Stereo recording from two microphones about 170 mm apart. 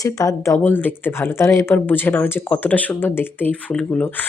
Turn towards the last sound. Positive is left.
turn(degrees=10)  # may be behind; listen again after turning